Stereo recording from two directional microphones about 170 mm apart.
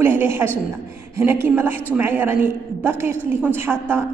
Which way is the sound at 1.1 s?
15° right (ahead or behind).